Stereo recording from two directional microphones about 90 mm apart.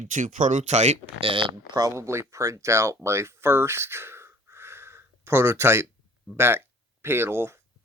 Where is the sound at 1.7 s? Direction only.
40° right (ahead or behind).